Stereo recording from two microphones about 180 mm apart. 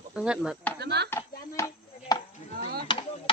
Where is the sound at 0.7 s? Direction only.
65° right (ahead or behind).